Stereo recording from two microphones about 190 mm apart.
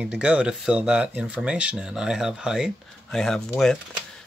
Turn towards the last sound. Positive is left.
turn(degrees=0)  # may be behind; listen again after turning